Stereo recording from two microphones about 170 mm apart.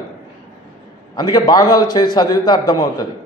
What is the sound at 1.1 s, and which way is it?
A man's voice, 25° left (ahead or behind).